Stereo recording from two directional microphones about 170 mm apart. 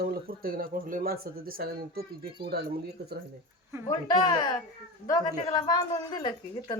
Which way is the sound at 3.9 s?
25° left (ahead or behind).